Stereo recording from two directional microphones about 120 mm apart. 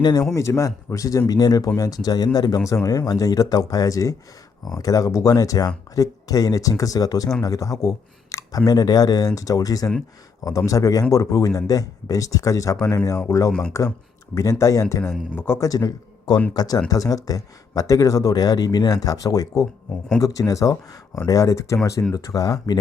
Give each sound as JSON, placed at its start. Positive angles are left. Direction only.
{"t": 0.0, "sound": "speech", "side_deg": 30}
{"t": 13.5, "sound": "speech", "side_deg": 10}
{"t": 14.6, "sound": "speech", "side_deg": 25}